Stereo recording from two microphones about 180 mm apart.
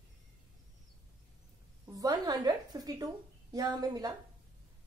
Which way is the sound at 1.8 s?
20° right (ahead or behind).